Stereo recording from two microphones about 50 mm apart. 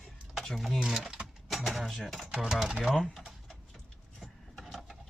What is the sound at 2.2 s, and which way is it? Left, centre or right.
Speech, centre.